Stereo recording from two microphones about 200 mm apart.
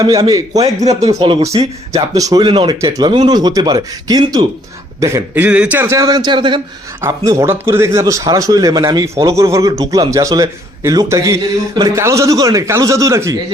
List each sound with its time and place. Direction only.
0.0 s speech: 20° right (ahead or behind)
0.9 s speech: 30° right (ahead or behind)
1.4 s a man's voice: 15° right (ahead or behind)